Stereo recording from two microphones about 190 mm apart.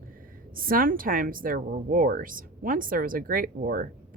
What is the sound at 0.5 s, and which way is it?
Speech, 50° right (ahead or behind).